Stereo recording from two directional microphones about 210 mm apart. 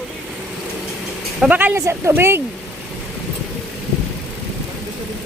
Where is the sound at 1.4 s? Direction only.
10° right (ahead or behind).